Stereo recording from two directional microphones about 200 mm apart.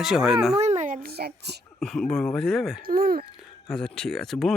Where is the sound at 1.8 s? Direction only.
5° left (ahead or behind).